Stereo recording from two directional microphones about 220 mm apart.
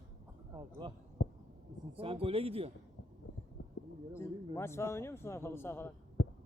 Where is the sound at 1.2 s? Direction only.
55° left (ahead or behind).